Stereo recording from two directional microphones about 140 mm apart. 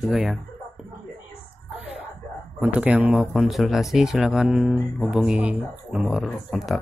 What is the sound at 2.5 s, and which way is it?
Speech, 10° right (ahead or behind).